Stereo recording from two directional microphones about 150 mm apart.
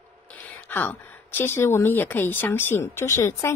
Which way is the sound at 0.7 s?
15° left (ahead or behind).